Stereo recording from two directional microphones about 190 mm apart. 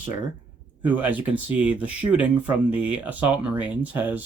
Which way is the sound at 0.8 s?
10° right (ahead or behind).